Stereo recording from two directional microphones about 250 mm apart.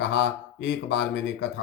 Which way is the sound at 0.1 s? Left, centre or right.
Left.